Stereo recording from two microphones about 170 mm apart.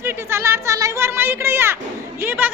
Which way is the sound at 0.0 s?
15° right (ahead or behind).